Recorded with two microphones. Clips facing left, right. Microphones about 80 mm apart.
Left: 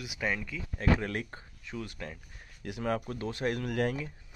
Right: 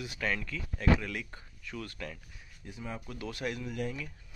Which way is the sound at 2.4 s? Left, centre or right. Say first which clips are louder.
Left 10 dB; left.